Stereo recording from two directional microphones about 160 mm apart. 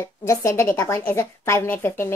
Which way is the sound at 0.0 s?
15° left (ahead or behind).